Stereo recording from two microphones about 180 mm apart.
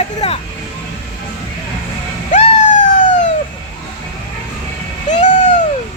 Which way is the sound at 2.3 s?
45° left (ahead or behind).